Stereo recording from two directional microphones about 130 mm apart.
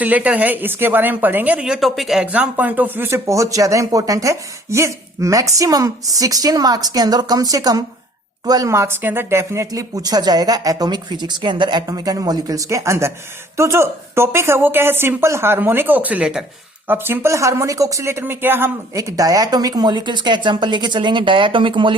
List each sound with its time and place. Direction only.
0.0 s a woman's voice: 10° right (ahead or behind); by 21.9 s 40° right (ahead or behind)